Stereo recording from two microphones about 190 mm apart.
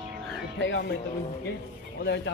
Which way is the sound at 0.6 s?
65° left (ahead or behind).